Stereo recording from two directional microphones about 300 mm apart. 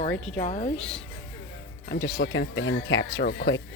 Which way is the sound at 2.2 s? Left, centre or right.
Left.